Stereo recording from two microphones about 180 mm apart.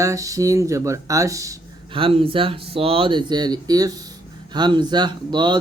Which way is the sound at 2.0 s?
30° right (ahead or behind).